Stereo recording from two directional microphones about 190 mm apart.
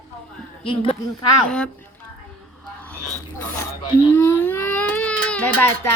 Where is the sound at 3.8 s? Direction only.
15° left (ahead or behind).